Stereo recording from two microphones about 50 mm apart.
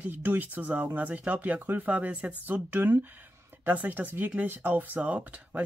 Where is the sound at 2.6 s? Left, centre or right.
Right.